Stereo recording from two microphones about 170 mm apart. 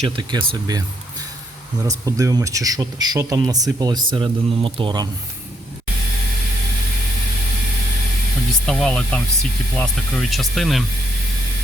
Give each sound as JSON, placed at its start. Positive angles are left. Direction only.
{"t": 0.2, "sound": "speech", "side_deg": -25}
{"t": 1.9, "sound": "speech", "side_deg": -20}
{"t": 8.6, "sound": "speech", "side_deg": 5}